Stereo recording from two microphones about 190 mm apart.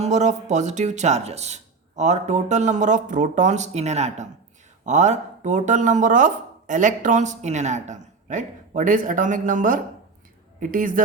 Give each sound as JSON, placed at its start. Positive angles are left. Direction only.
{"t": 0.0, "sound": "a woman's voice", "side_deg": -35}